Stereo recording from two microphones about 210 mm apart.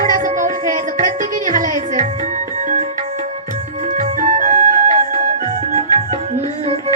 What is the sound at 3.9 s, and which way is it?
Music, 35° right (ahead or behind).